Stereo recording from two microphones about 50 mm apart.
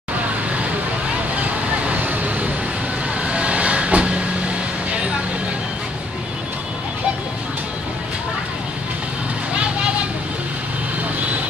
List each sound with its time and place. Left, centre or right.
1.3 s vehicle: right